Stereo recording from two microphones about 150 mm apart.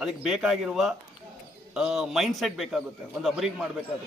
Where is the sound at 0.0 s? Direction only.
5° right (ahead or behind).